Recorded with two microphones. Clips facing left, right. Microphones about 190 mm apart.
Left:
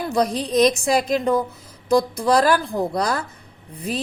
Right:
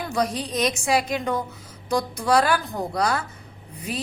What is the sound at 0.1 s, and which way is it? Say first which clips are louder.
A woman's voice: left 5 dB; 35° left (ahead or behind).